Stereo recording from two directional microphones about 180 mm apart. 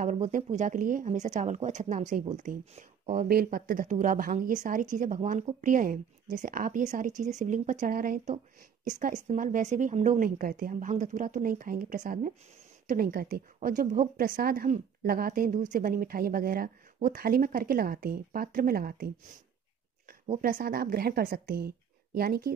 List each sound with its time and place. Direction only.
0.0 s speech: 40° right (ahead or behind)
3.3 s a woman's voice: 55° right (ahead or behind)